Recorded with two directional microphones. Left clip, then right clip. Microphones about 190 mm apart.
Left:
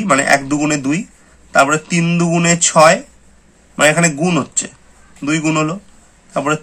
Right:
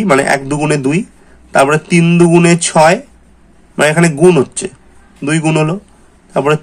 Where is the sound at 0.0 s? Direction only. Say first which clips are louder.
Right 2 dB; 20° right (ahead or behind).